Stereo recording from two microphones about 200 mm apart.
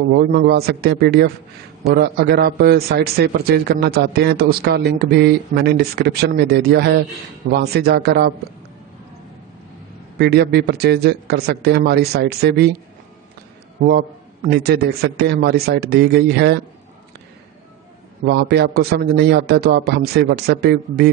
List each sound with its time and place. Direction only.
0.1 s a man's voice: 50° right (ahead or behind)
10.1 s a man's voice: 55° right (ahead or behind)
13.8 s a man's voice: 50° right (ahead or behind)
18.2 s a man's voice: 55° right (ahead or behind)